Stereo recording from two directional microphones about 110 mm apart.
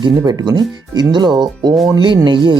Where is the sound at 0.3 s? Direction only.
40° right (ahead or behind).